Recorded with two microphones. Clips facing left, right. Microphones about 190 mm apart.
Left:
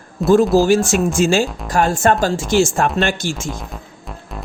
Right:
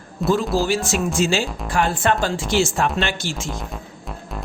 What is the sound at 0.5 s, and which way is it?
Speech, 45° left (ahead or behind).